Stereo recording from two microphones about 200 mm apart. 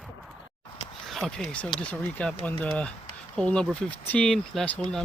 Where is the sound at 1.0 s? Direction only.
Centre (ahead or behind).